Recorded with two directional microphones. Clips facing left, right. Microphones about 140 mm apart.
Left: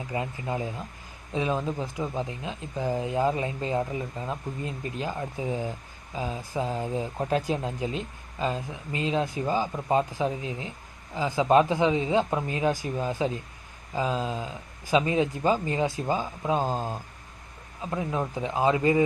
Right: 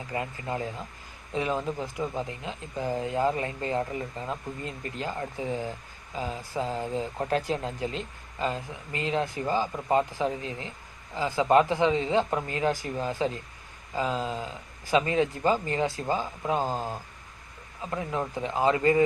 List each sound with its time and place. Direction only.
0.1 s speech: 20° left (ahead or behind)